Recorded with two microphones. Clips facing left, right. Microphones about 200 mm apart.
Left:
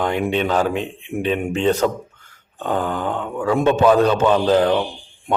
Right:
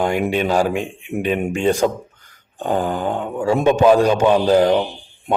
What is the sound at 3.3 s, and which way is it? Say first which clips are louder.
Speech: right 1 dB; 25° right (ahead or behind).